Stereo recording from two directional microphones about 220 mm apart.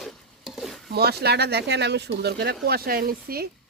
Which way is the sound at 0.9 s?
45° right (ahead or behind).